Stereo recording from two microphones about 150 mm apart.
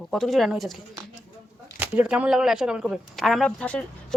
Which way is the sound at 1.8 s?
10° right (ahead or behind).